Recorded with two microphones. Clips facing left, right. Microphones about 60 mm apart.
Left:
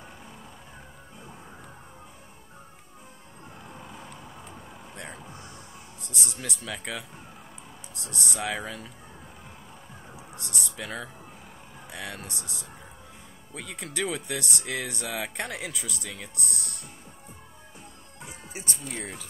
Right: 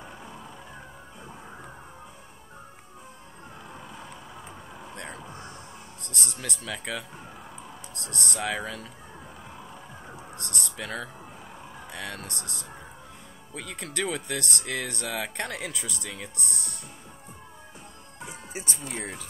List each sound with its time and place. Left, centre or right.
4.0 s vehicle: centre
4.9 s music: centre
5.3 s music: right
6.0 s speech: centre
10.1 s speech: centre
18.2 s music: centre